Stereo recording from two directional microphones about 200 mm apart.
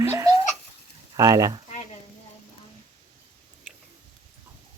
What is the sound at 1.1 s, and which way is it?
Speech, 15° right (ahead or behind).